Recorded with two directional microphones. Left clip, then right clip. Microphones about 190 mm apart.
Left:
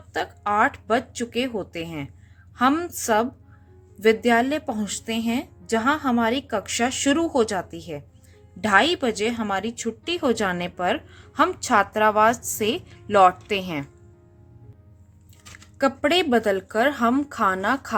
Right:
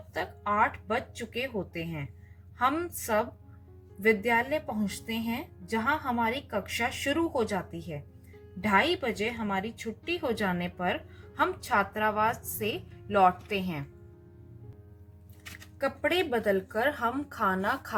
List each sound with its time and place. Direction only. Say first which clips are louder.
0.1 s a woman's voice: left 6 dB; 50° left (ahead or behind)
5.8 s a woman's voice: left 6 dB; 50° left (ahead or behind)
15.8 s a woman's voice: left 8 dB; 45° left (ahead or behind)